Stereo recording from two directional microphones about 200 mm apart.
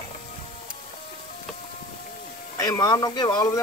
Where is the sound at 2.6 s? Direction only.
15° left (ahead or behind).